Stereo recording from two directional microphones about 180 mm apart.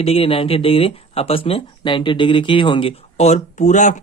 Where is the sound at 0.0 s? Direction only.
30° left (ahead or behind).